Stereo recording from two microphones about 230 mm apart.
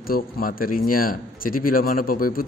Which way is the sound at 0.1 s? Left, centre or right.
Left.